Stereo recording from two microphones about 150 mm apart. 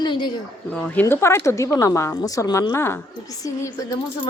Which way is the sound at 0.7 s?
10° left (ahead or behind).